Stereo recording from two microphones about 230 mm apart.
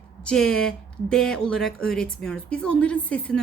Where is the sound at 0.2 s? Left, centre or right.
Centre.